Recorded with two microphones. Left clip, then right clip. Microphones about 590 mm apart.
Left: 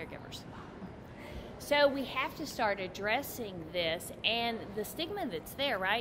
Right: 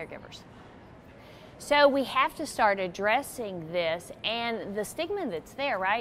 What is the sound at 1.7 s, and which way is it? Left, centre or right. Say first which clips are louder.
A woman's voice: right 6 dB; right.